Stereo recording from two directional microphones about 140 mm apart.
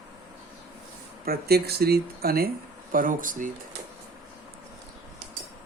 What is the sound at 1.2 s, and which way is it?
Speech, 90° right.